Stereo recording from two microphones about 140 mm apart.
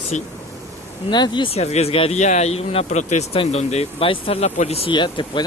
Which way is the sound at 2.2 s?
55° left (ahead or behind).